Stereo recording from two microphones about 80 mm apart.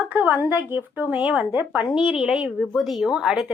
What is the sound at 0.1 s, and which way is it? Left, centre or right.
A woman's voice, right.